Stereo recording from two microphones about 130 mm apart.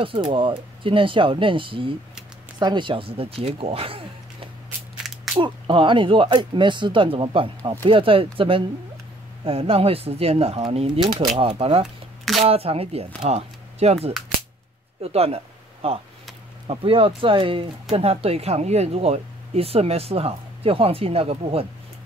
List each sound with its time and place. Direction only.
0.0 s speech: 45° right (ahead or behind)
5.1 s a sound: 5° right (ahead or behind)
5.4 s speech: 40° right (ahead or behind)